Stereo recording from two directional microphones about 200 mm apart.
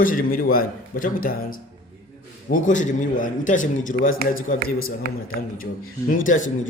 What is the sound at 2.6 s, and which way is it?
A man's voice, 40° left (ahead or behind).